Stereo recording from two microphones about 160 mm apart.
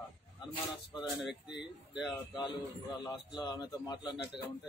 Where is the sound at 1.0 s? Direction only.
Centre (ahead or behind).